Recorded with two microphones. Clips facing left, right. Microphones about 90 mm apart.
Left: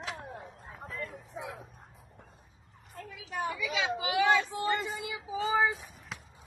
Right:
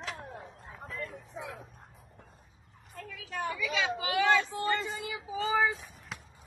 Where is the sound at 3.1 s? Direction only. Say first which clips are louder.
Left 1 dB; 20° left (ahead or behind).